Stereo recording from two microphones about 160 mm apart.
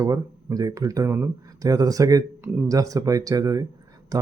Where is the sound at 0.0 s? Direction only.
20° right (ahead or behind).